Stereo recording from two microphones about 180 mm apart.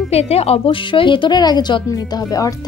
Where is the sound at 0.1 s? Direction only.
35° left (ahead or behind).